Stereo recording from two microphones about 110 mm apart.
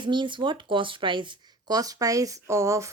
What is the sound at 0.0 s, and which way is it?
Speech, 45° right (ahead or behind).